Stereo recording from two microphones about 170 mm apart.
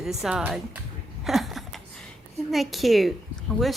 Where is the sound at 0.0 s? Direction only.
Centre (ahead or behind).